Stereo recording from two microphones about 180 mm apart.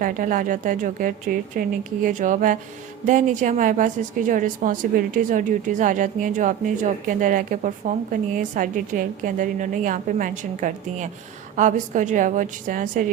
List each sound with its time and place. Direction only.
0.0 s a woman's voice: 50° right (ahead or behind)